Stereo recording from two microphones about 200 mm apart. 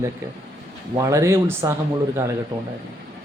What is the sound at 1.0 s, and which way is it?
Speech, 15° right (ahead or behind).